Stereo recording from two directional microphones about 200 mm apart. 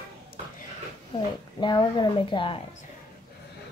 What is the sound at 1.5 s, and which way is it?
Speech, 20° left (ahead or behind).